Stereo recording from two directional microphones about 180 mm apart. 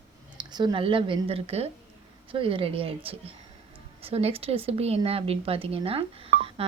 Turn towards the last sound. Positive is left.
turn(degrees=-30)  # may be behind; listen again after turning